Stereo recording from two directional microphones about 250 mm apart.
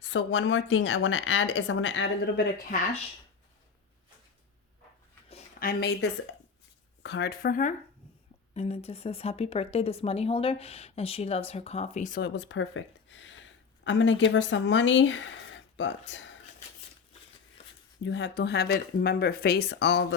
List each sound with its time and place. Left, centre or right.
0.0 s speech: left
5.3 s a sound: left
7.0 s speech: left
8.5 s speech: left
18.0 s speech: left